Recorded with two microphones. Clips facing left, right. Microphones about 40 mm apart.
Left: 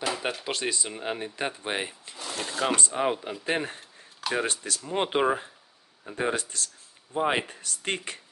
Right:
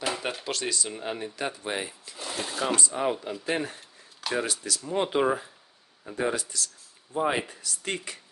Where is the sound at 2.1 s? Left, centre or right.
Centre.